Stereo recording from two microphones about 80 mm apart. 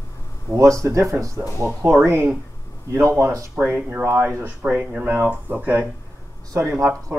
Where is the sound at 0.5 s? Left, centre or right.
Right.